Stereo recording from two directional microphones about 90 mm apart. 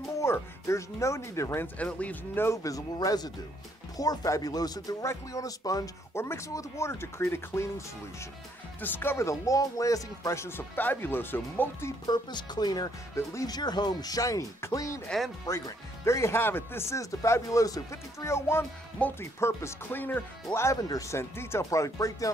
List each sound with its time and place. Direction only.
0.2 s speech: 30° left (ahead or behind)
1.8 s speech: 15° left (ahead or behind)
2.4 s speech: 35° left (ahead or behind)
6.1 s speech: 30° left (ahead or behind)
8.8 s speech: 25° left (ahead or behind)
12.1 s speech: 50° left (ahead or behind)
13.1 s speech: 35° left (ahead or behind)
13.5 s speech: 50° left (ahead or behind)
15.0 s speech: centre (ahead or behind)
15.4 s speech: 35° left (ahead or behind)
19.0 s speech: 15° left (ahead or behind)
19.4 s speech: 25° left (ahead or behind)
20.5 s speech: 35° left (ahead or behind)